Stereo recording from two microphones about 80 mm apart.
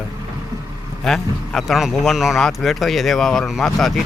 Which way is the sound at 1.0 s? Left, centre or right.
Centre.